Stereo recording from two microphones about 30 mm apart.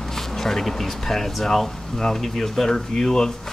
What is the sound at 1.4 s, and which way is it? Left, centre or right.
Speech, centre.